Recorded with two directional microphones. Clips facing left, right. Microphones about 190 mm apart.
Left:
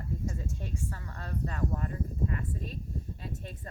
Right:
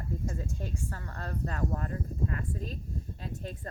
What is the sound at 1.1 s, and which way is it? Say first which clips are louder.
Speech: even; 40° right (ahead or behind).